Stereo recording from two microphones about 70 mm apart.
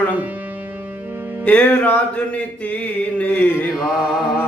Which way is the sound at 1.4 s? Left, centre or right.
Left.